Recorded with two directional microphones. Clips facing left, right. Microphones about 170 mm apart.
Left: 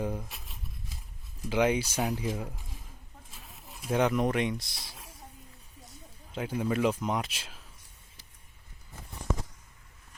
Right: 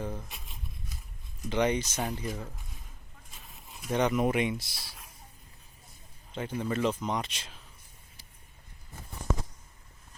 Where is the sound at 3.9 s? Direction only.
Centre (ahead or behind).